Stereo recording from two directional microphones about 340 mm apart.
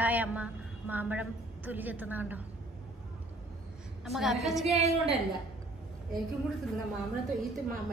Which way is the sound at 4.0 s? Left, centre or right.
Centre.